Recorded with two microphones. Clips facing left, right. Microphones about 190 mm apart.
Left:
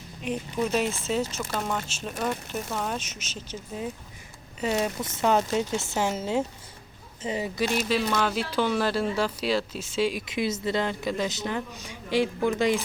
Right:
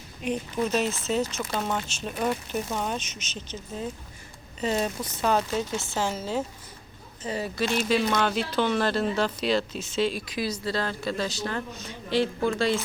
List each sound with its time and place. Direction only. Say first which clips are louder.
0.2 s speech: right 1 dB; centre (ahead or behind)
1.5 s speech: right 1 dB; centre (ahead or behind)
5.0 s speech: left 2 dB; 25° left (ahead or behind)
7.9 s speech: right 1 dB; centre (ahead or behind)